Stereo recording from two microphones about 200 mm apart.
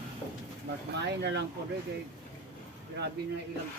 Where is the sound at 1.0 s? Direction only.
60° right (ahead or behind).